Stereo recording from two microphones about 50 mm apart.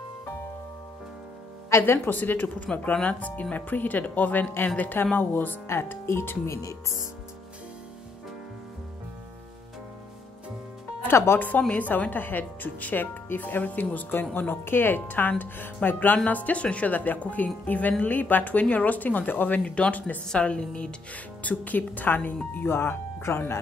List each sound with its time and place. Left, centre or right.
1.8 s speech: left
2.8 s speech: left
5.7 s speech: left
11.1 s speech: left
11.3 s speech: left
16.3 s speech: left
19.6 s speech: left
20.2 s speech: centre; by 23.6 s left